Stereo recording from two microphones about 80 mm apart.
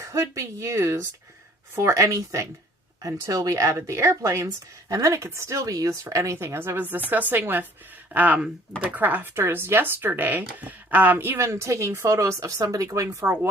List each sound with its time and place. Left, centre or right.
0.0 s speech: right